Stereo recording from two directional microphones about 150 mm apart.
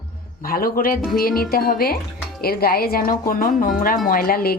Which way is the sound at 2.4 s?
90° left.